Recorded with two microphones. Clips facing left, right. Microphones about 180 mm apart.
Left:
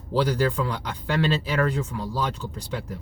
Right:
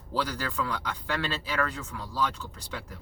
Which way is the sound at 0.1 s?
25° left (ahead or behind).